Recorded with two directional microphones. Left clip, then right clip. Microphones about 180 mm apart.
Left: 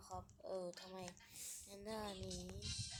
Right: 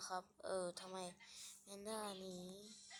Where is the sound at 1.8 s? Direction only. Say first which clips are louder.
Even; centre (ahead or behind).